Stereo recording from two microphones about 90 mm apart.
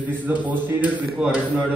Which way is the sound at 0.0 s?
20° right (ahead or behind).